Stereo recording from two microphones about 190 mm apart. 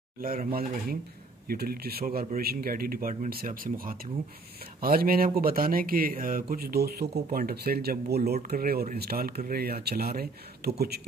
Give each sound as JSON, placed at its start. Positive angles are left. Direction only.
{"t": 0.2, "sound": "speech", "side_deg": -50}